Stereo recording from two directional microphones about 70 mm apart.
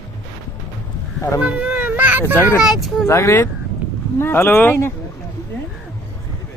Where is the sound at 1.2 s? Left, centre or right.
Left.